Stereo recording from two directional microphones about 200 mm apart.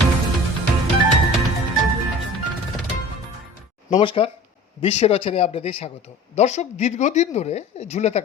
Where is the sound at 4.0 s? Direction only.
25° left (ahead or behind).